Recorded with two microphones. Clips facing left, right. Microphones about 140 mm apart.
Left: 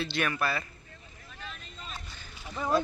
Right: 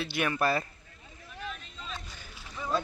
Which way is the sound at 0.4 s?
40° right (ahead or behind).